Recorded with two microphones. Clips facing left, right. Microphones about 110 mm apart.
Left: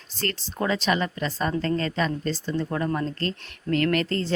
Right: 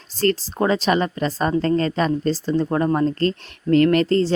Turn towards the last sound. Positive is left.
turn(degrees=-35)  # may be behind; listen again after turning